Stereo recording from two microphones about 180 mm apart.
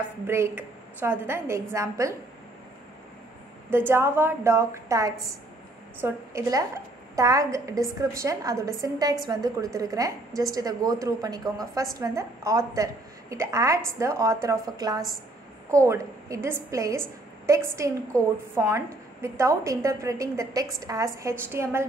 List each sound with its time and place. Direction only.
0.3 s a woman's voice: 15° right (ahead or behind)
3.7 s a woman's voice: 15° right (ahead or behind)